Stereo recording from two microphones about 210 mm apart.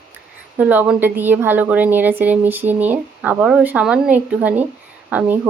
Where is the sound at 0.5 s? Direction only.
10° right (ahead or behind).